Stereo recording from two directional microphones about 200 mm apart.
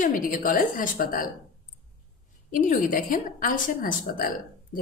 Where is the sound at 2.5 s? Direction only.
45° left (ahead or behind).